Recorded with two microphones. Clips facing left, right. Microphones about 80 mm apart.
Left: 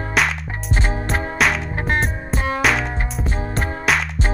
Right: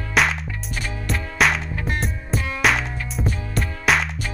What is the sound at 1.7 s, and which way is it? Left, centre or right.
Music, left.